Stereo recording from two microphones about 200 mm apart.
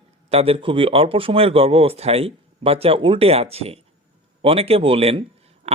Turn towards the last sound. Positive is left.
turn(degrees=-30)  # may be behind; listen again after turning